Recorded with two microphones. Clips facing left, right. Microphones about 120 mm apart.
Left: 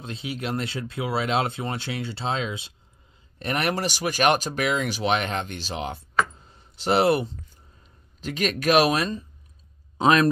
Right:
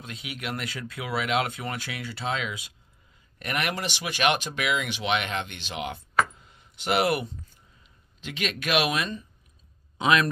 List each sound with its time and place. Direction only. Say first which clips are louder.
0.0 s speech: left 5 dB; 30° left (ahead or behind)
6.3 s a sound: left 2 dB; 35° left (ahead or behind)
7.8 s a man's voice: left 6 dB; 40° left (ahead or behind)